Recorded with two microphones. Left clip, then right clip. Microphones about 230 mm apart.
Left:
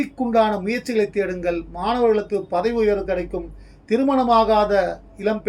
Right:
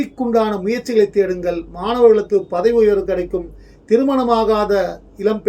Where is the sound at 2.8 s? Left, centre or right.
Right.